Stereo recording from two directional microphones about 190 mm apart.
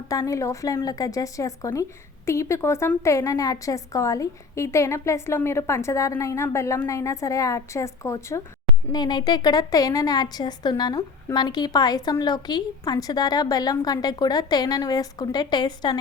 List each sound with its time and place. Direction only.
0.1 s a woman's voice: 15° left (ahead or behind)